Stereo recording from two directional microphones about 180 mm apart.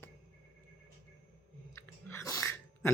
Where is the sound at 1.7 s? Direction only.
15° left (ahead or behind).